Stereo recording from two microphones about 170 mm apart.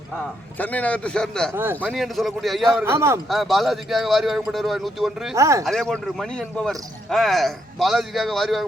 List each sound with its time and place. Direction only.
0.6 s speech: 10° left (ahead or behind)
1.5 s a man's voice: 15° right (ahead or behind)
1.9 s speech: centre (ahead or behind)
2.6 s a man's voice: 15° right (ahead or behind)
3.2 s speech: centre (ahead or behind)
5.3 s a man's voice: 20° right (ahead or behind)
5.6 s speech: centre (ahead or behind)